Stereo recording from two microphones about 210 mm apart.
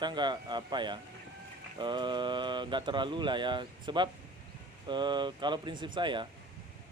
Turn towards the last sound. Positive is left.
turn(degrees=-20)  # may be behind; listen again after turning